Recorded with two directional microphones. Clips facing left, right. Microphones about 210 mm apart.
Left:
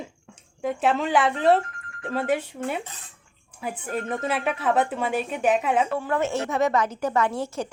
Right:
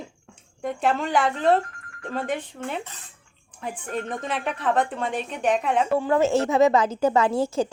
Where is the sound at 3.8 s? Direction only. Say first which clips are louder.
Left 2 dB; 5° left (ahead or behind).